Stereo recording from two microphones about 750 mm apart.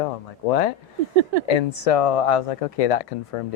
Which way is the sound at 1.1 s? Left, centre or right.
Right.